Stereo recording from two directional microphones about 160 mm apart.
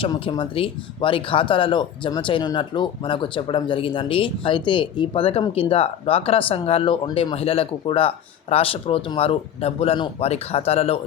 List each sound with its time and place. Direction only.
0.0 s speech: 30° left (ahead or behind)